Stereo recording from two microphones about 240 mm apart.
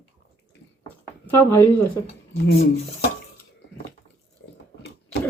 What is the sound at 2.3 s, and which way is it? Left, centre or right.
Speech, left.